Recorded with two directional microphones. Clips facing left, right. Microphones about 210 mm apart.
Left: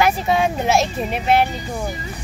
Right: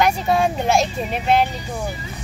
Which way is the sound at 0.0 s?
Centre (ahead or behind).